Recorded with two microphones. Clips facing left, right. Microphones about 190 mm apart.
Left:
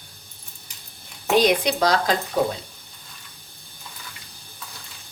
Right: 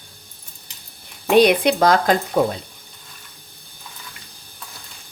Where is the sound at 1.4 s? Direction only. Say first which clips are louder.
Right 6 dB; 60° right (ahead or behind).